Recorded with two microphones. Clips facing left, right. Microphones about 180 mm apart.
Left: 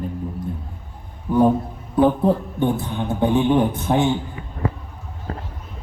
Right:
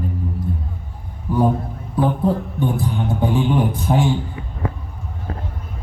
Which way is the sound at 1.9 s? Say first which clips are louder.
Left 2 dB; 20° left (ahead or behind).